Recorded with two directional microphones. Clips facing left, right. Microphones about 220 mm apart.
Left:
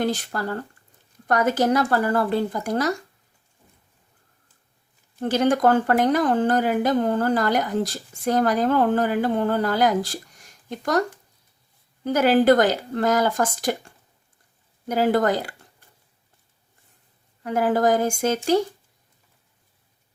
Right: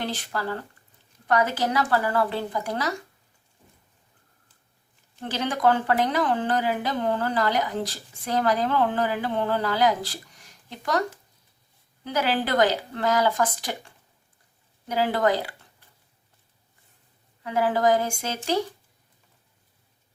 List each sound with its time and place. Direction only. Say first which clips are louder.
0.0 s speech: left 5 dB; 45° left (ahead or behind)
5.2 s speech: left 5 dB; 45° left (ahead or behind)
12.0 s speech: left 9 dB; 45° left (ahead or behind)
17.4 s speech: left 2 dB; 45° left (ahead or behind)